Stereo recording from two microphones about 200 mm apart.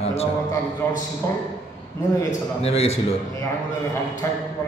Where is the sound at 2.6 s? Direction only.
30° left (ahead or behind).